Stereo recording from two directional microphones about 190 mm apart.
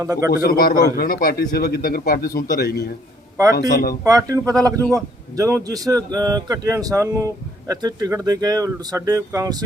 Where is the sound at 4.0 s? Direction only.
15° right (ahead or behind).